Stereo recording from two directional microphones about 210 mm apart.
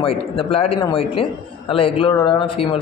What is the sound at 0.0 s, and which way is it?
A man's voice, 25° left (ahead or behind).